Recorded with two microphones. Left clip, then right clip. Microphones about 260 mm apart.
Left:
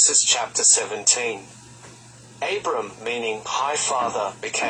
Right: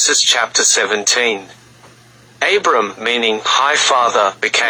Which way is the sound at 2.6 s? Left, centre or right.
Right.